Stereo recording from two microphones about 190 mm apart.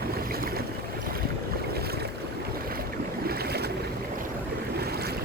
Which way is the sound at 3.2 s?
55° right (ahead or behind).